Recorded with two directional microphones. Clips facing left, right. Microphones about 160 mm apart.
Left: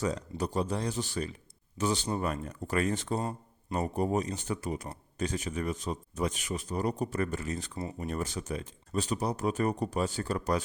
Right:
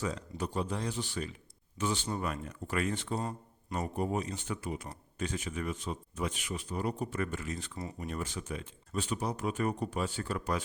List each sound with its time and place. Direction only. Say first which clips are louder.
0.0 s speech: left 4 dB; 40° left (ahead or behind)